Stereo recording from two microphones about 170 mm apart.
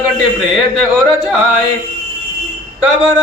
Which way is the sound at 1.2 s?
10° right (ahead or behind).